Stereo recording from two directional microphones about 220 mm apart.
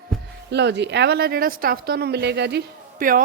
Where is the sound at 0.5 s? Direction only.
50° right (ahead or behind).